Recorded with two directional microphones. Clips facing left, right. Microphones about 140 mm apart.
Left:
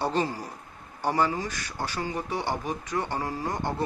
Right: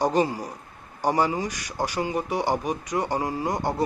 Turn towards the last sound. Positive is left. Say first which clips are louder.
# right 4 dB
turn(degrees=-15)  # may be behind; listen again after turning